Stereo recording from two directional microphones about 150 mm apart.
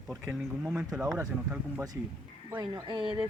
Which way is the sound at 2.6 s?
30° right (ahead or behind).